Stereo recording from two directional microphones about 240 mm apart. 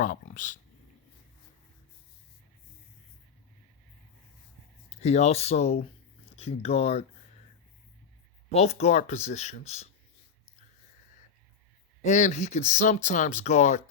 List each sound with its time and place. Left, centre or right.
0.0 s speech: left
4.9 s speech: left
8.5 s speech: left
12.0 s speech: left